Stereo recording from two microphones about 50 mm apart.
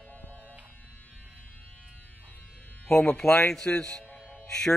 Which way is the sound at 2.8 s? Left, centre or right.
Centre.